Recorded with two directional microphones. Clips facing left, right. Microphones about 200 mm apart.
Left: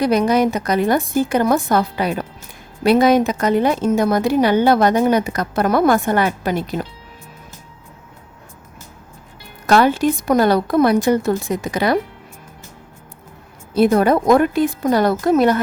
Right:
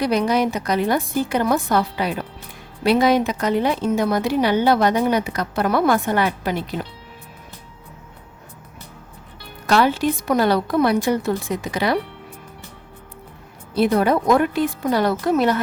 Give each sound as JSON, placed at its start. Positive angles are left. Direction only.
{"t": 0.0, "sound": "a woman's voice", "side_deg": 45}
{"t": 9.6, "sound": "a woman's voice", "side_deg": 45}
{"t": 13.7, "sound": "a woman's voice", "side_deg": 45}